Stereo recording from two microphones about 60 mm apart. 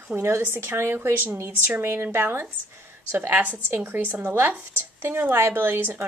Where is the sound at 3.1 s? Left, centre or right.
Right.